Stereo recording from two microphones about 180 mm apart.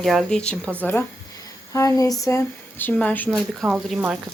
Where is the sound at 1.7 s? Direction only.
20° left (ahead or behind).